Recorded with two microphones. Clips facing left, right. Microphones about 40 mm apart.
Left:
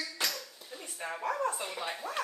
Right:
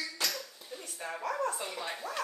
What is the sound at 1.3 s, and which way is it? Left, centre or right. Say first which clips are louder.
Speech: left 1 dB; centre.